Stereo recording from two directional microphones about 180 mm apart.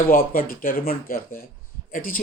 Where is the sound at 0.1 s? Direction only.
50° left (ahead or behind).